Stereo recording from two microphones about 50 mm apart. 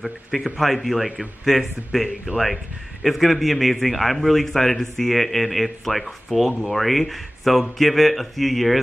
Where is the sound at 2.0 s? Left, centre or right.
Centre.